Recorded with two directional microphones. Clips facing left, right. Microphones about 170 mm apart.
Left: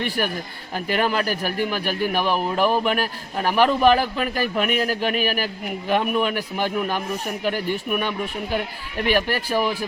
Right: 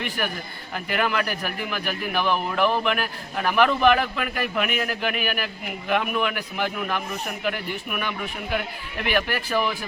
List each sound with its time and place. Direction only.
0.9 s a man's voice: 35° left (ahead or behind)